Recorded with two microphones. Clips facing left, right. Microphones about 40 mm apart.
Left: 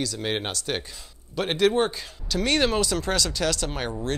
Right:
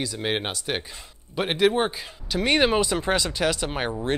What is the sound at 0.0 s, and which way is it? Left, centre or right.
Speech, centre.